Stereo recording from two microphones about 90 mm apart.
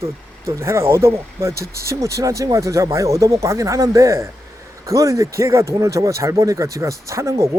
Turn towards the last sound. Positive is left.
turn(degrees=-35)  # may be behind; listen again after turning